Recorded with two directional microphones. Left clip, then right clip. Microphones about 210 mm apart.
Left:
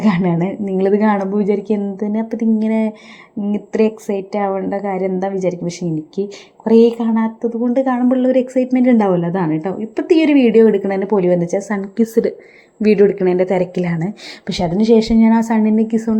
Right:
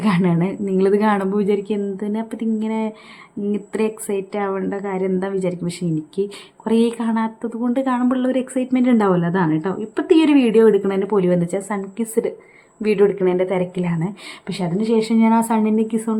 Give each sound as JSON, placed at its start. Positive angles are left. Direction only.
{"t": 0.0, "sound": "a woman's voice", "side_deg": 0}